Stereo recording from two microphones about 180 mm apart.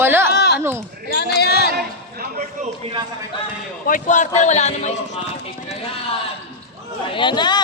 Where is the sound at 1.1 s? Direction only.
65° left (ahead or behind).